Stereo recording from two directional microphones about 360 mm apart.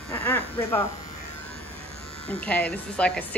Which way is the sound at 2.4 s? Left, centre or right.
Centre.